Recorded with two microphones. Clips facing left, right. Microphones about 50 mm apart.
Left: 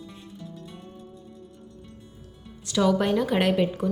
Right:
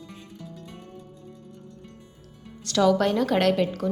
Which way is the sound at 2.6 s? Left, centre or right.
Centre.